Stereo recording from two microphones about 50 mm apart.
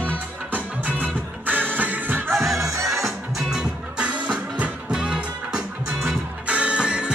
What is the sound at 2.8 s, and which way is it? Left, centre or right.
Music, centre.